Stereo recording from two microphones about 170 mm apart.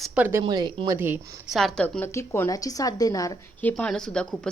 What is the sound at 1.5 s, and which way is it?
A woman's voice, 5° left (ahead or behind).